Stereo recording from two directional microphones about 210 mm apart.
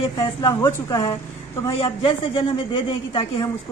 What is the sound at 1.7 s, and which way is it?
A woman's voice, 25° left (ahead or behind).